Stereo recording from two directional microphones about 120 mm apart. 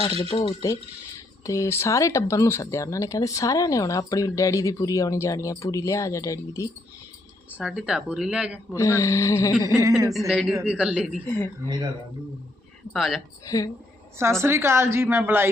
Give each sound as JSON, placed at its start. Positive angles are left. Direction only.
{"t": 0.0, "sound": "speech", "side_deg": 50}
{"t": 1.5, "sound": "speech", "side_deg": 25}
{"t": 7.6, "sound": "speech", "side_deg": -5}
{"t": 8.7, "sound": "speech", "side_deg": 25}
{"t": 10.1, "sound": "speech", "side_deg": 0}
{"t": 12.9, "sound": "speech", "side_deg": 0}
{"t": 13.4, "sound": "speech", "side_deg": 30}
{"t": 14.2, "sound": "a woman's voice", "side_deg": -20}